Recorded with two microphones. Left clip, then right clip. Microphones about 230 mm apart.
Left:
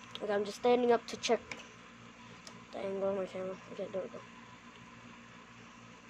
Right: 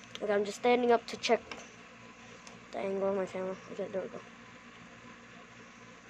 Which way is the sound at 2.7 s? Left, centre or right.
Centre.